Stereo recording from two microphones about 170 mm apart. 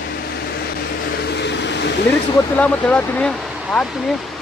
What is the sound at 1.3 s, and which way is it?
Vehicle, 90° left.